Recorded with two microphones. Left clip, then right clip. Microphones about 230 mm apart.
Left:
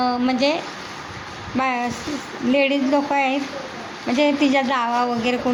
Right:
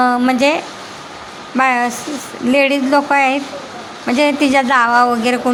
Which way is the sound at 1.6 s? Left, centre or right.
Centre.